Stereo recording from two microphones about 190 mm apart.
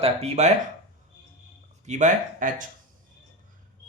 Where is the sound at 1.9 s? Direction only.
40° right (ahead or behind).